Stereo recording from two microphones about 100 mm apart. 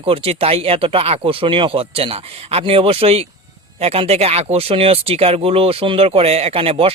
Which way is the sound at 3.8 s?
90° right.